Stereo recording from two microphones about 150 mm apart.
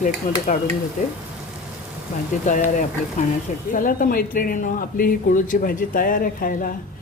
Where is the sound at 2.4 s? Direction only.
60° left (ahead or behind).